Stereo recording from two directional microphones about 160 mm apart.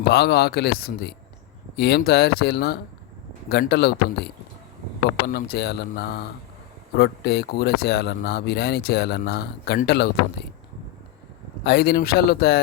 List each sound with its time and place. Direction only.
0.1 s speech: 90° left
0.8 s speech: 70° left (ahead or behind)
1.7 s speech: 90° left
11.6 s speech: 75° left (ahead or behind)